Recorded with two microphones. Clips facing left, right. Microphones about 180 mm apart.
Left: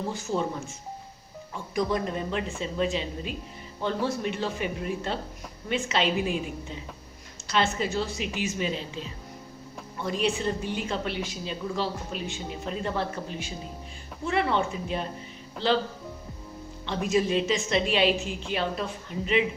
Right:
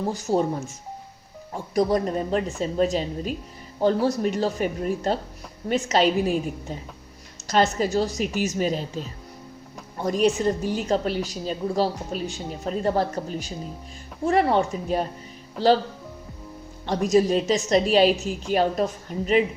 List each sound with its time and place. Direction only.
0.1 s a woman's voice: 40° right (ahead or behind)
1.5 s a woman's voice: 40° right (ahead or behind)
16.8 s a woman's voice: 40° right (ahead or behind)